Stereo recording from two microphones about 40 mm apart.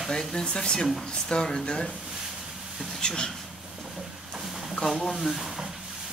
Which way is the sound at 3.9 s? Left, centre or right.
Centre.